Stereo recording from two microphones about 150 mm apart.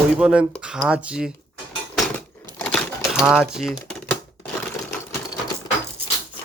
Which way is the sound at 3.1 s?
5° right (ahead or behind).